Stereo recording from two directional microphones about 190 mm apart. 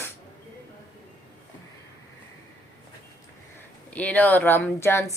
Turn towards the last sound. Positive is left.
turn(degrees=15)  # may be behind; listen again after turning